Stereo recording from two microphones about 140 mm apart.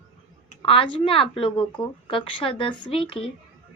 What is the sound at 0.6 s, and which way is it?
A woman's voice, 40° left (ahead or behind).